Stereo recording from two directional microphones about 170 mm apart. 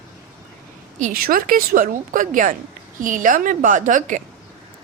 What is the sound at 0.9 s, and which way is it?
A woman's voice, 55° right (ahead or behind).